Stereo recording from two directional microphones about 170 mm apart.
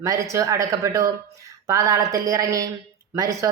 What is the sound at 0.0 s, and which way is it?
Speech, 20° right (ahead or behind).